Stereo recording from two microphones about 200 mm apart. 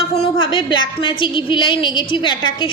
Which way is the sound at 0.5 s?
25° left (ahead or behind).